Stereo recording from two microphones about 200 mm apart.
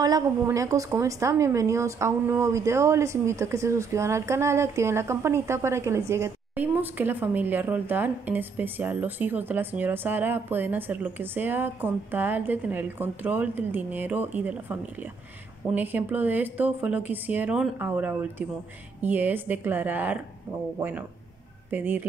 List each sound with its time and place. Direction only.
0.0 s a woman's voice: 15° right (ahead or behind)
21.6 s speech: 10° right (ahead or behind)